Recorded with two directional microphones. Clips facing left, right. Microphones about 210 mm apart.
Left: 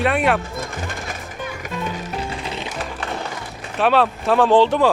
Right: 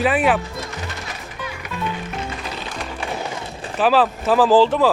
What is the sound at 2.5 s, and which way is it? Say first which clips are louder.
Music: left 2 dB; 25° left (ahead or behind).